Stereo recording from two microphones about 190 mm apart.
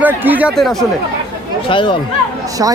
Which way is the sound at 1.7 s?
25° left (ahead or behind).